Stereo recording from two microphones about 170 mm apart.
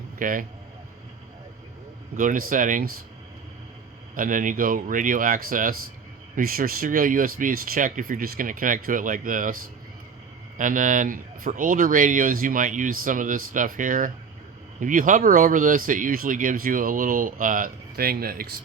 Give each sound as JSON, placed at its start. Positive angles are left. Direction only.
{"t": 0.2, "sound": "speech", "side_deg": -55}
{"t": 2.1, "sound": "speech", "side_deg": -50}
{"t": 4.1, "sound": "speech", "side_deg": -55}
{"t": 10.6, "sound": "speech", "side_deg": -50}